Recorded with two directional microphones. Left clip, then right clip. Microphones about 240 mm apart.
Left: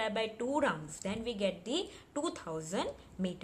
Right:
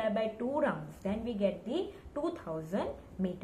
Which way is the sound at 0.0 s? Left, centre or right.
Left.